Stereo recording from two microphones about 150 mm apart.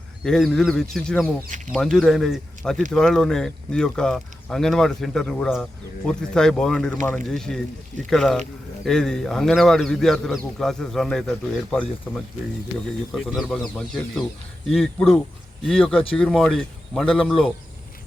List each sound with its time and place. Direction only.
0.3 s speech: 5° left (ahead or behind)